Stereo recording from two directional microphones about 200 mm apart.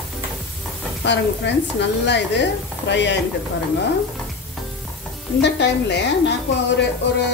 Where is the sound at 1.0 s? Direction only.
60° left (ahead or behind).